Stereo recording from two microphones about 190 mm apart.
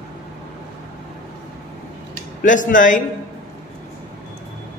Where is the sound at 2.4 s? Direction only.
45° left (ahead or behind).